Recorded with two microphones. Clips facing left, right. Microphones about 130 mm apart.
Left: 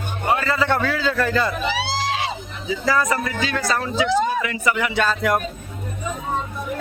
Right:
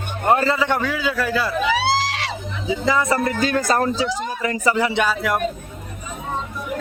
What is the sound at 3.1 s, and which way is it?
A man's voice, 40° right (ahead or behind).